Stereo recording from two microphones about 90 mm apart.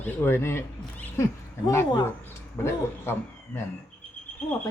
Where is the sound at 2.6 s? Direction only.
25° left (ahead or behind).